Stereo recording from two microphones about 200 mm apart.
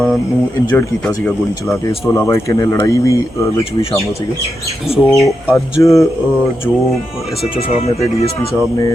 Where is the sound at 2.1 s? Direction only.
15° left (ahead or behind).